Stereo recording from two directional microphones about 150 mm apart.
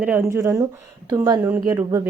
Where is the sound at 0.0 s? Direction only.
15° right (ahead or behind).